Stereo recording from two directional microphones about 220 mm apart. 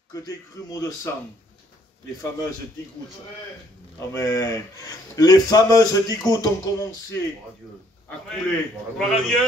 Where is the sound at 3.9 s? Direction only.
15° left (ahead or behind).